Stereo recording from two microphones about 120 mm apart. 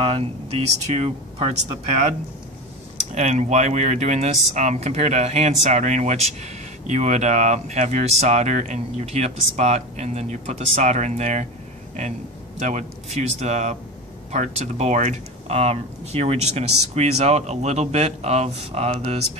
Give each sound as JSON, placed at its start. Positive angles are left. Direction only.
{"t": 0.0, "sound": "speech", "side_deg": -60}
{"t": 3.2, "sound": "speech", "side_deg": -80}
{"t": 12.5, "sound": "speech", "side_deg": -85}